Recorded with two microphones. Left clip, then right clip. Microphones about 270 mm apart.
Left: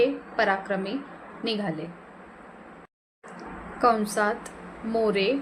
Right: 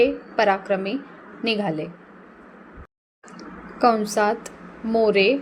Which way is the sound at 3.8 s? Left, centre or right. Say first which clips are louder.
Right 4 dB; centre.